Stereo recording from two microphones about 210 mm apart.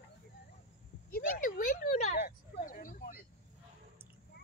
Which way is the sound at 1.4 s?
40° left (ahead or behind).